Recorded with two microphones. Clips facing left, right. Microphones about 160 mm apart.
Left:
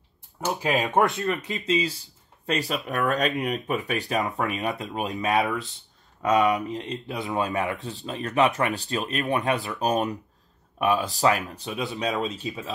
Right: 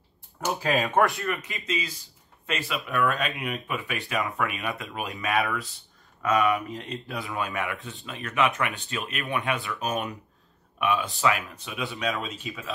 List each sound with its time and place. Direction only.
0.6 s speech: 20° left (ahead or behind); by 12.7 s 40° left (ahead or behind)